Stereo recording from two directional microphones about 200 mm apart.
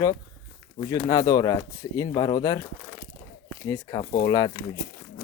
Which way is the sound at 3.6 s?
15° left (ahead or behind).